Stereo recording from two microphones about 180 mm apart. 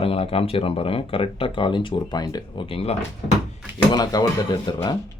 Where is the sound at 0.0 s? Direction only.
30° left (ahead or behind).